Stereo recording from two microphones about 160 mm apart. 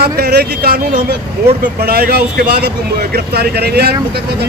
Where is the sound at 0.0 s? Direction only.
75° right (ahead or behind).